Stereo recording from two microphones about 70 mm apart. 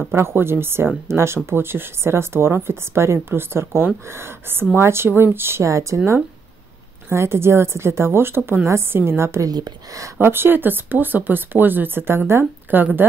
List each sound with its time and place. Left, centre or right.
0.1 s speech: right
7.1 s speech: right
9.5 s speech: right
10.2 s speech: right